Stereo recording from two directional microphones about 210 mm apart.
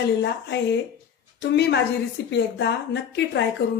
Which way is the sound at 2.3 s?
55° left (ahead or behind).